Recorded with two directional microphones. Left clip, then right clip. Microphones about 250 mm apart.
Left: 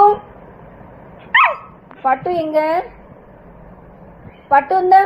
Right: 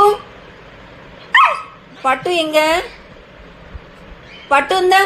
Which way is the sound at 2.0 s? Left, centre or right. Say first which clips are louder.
Right 1 dB; right.